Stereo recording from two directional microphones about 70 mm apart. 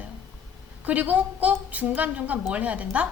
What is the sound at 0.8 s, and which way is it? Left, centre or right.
A woman's voice, right.